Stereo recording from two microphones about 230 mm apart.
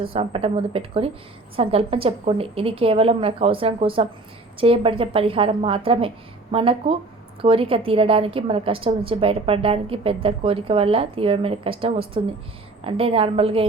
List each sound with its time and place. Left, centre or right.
0.0 s a woman's voice: right